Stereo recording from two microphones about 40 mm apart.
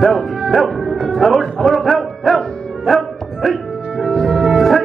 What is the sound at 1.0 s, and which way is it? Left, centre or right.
Music, centre.